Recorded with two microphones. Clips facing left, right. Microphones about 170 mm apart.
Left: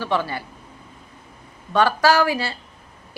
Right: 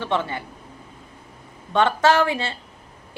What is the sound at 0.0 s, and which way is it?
Speech, 25° right (ahead or behind).